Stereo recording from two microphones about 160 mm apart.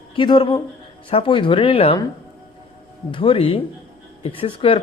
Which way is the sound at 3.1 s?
30° left (ahead or behind).